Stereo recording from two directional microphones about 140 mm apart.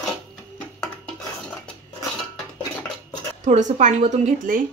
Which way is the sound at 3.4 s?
60° right (ahead or behind).